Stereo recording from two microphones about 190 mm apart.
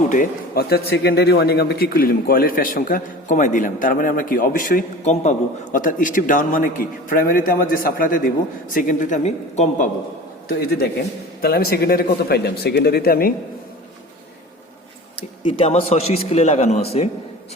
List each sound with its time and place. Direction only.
0.1 s a man's voice: 50° left (ahead or behind)
10.6 s a man's voice: 55° left (ahead or behind)
15.4 s a man's voice: 30° left (ahead or behind)